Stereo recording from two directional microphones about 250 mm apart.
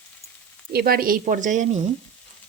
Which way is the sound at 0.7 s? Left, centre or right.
Right.